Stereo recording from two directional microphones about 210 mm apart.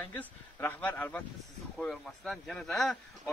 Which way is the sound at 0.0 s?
10° left (ahead or behind).